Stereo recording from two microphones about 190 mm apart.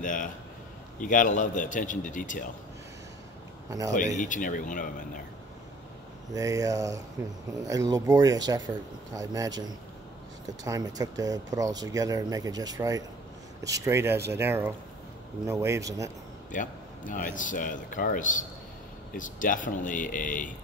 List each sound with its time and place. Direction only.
0.0 s a man's voice: 45° left (ahead or behind)
4.2 s a man's voice: 45° left (ahead or behind)
6.3 s speech: 20° right (ahead or behind)
10.6 s speech: 20° right (ahead or behind)
16.5 s a man's voice: 45° left (ahead or behind)